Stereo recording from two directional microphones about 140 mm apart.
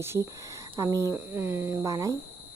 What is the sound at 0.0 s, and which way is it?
Speech, 20° right (ahead or behind).